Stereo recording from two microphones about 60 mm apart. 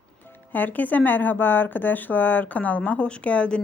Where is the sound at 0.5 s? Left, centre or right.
Left.